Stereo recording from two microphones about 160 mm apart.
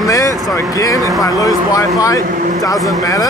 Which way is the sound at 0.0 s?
20° left (ahead or behind).